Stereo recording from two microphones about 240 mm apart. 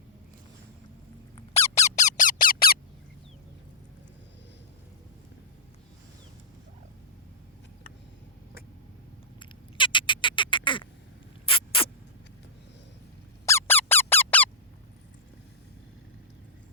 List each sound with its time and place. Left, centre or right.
1.4 s squeak: left
9.4 s quack: centre
11.4 s rodents: left
13.4 s squeak: centre